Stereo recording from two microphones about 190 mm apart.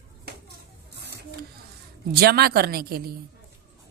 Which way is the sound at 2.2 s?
55° right (ahead or behind).